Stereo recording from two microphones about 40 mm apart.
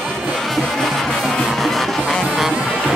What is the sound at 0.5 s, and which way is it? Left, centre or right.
Music, centre.